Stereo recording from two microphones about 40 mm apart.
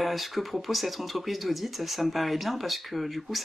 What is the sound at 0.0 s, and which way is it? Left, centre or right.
Speech, centre.